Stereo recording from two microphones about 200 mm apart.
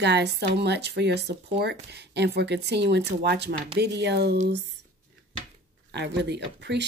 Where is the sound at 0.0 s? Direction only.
60° right (ahead or behind).